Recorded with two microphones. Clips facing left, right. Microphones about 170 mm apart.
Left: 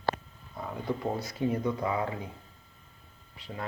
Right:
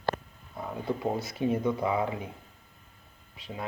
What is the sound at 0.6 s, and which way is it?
Speech, 20° right (ahead or behind).